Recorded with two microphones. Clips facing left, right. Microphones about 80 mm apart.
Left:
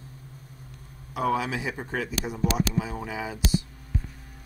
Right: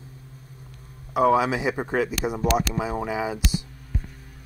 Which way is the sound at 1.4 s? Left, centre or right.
Centre.